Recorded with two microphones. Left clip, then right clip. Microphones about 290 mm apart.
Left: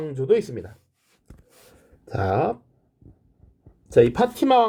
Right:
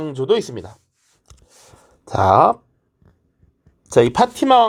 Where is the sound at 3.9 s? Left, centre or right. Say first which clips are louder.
Right 3 dB; centre.